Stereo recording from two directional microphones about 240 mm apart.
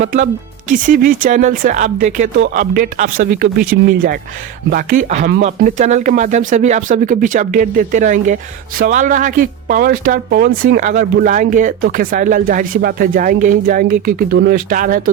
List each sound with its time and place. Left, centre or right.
0.7 s speech: right